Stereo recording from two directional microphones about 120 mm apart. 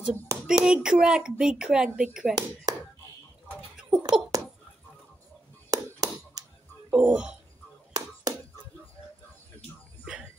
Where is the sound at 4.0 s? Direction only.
30° right (ahead or behind).